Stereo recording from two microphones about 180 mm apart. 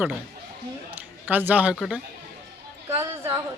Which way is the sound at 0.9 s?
10° right (ahead or behind).